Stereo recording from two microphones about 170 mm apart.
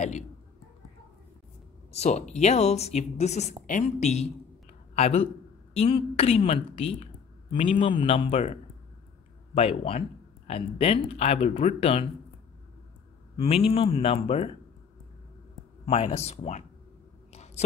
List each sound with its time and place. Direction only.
1.9 s a man's voice: 40° left (ahead or behind)
13.7 s speech: 35° left (ahead or behind)
15.8 s speech: 40° left (ahead or behind)
17.3 s a sound: 40° left (ahead or behind)